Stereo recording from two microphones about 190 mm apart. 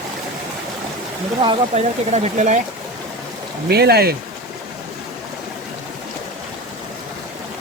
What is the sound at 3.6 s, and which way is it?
Speech, 55° right (ahead or behind).